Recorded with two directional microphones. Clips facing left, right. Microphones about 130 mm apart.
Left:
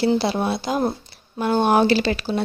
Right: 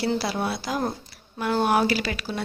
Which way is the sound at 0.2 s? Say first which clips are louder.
Left 5 dB; 25° left (ahead or behind).